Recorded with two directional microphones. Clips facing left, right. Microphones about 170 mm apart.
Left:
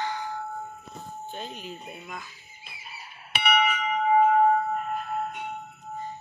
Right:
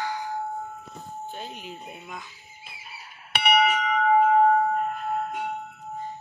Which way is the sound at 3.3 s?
70° right (ahead or behind).